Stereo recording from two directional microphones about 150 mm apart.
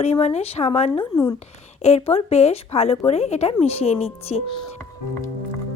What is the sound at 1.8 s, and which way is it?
Speech, 45° left (ahead or behind).